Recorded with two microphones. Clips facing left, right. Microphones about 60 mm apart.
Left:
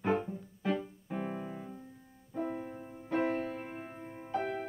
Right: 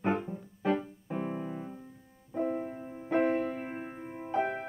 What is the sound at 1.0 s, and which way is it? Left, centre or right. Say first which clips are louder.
Keyboard: right 3 dB; centre.